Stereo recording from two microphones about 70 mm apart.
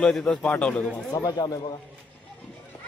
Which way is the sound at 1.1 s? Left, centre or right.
Left.